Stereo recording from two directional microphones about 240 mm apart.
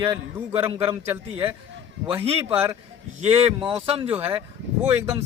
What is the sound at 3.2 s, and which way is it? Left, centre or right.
Speech, right.